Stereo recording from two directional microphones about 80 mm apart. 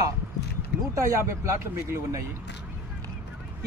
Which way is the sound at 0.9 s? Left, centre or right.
Right.